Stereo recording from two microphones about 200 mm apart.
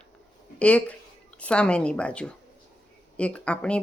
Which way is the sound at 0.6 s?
5° left (ahead or behind).